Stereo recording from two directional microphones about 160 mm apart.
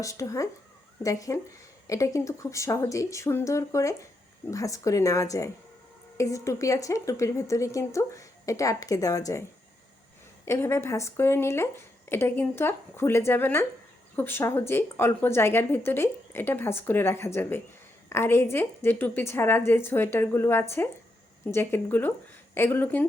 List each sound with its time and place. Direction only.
0.0 s a woman's voice: 20° left (ahead or behind)
10.4 s speech: 15° left (ahead or behind)